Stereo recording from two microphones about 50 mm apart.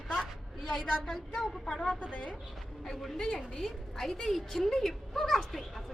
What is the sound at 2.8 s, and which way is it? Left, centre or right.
Speech, centre.